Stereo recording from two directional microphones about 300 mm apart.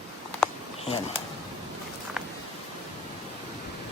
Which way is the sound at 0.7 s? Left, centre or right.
Centre.